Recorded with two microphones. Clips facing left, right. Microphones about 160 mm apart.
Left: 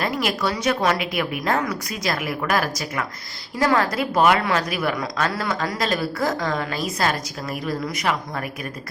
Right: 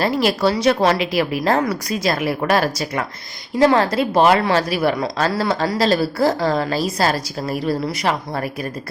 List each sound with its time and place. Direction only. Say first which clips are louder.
0.0 s a woman's voice: right 6 dB; 30° right (ahead or behind)